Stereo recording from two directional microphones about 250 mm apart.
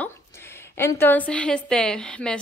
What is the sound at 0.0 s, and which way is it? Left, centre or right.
A woman's voice, centre.